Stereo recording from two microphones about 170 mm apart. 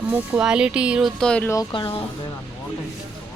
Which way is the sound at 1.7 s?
30° left (ahead or behind).